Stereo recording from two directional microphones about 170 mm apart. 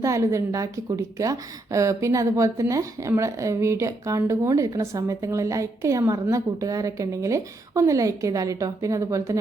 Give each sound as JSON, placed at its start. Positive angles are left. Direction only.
{"t": 0.0, "sound": "a woman's voice", "side_deg": -15}